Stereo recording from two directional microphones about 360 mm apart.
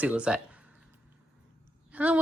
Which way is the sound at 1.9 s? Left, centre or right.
Centre.